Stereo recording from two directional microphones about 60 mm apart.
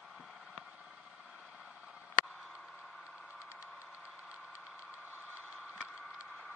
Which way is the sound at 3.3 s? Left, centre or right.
Right.